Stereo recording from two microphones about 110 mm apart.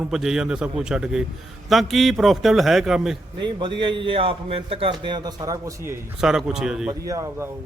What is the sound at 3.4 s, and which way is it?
A man's voice, 45° right (ahead or behind).